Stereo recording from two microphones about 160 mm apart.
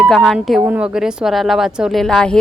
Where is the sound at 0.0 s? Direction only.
Centre (ahead or behind).